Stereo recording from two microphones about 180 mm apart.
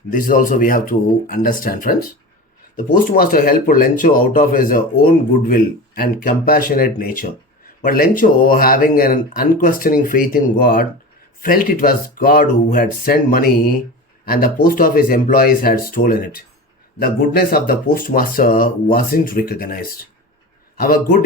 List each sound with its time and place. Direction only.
0.1 s a man's voice: 50° left (ahead or behind)